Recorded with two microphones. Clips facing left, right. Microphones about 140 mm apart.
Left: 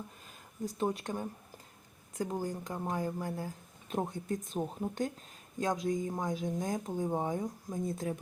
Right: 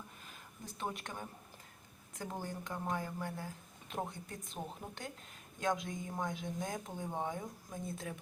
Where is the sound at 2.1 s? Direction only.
40° left (ahead or behind).